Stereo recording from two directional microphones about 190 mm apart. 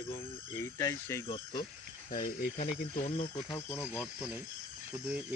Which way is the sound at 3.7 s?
15° left (ahead or behind).